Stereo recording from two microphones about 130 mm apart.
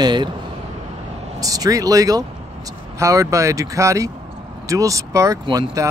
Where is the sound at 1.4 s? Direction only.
25° right (ahead or behind).